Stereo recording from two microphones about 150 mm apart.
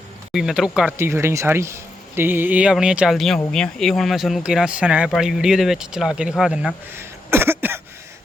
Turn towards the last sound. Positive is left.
turn(degrees=-15)  # may be behind; listen again after turning